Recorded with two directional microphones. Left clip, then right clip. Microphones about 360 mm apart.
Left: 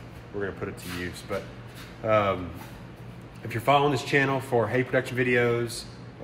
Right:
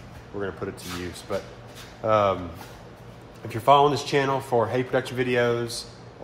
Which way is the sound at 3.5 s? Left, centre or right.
Centre.